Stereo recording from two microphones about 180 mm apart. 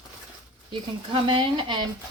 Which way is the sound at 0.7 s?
25° right (ahead or behind).